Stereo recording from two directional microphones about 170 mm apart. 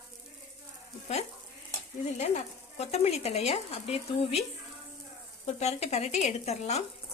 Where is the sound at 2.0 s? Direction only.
45° left (ahead or behind).